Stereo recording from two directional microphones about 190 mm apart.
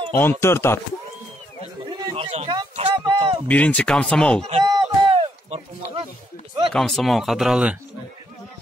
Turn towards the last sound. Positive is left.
turn(degrees=-5)  # may be behind; listen again after turning